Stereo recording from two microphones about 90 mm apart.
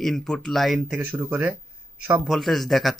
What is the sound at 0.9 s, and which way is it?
Speech, 20° right (ahead or behind).